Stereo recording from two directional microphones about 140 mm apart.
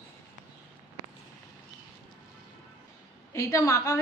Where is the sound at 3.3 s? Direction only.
25° left (ahead or behind).